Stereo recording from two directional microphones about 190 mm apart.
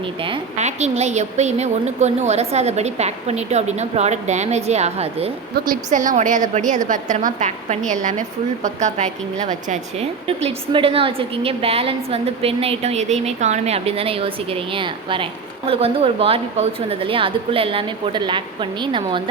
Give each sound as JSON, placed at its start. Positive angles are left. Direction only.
{"t": 0.0, "sound": "a woman's voice", "side_deg": -25}
{"t": 5.5, "sound": "a woman's voice", "side_deg": -45}